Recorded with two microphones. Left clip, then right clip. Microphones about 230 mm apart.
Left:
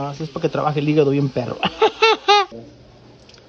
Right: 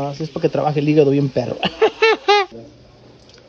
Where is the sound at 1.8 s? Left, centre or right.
Centre.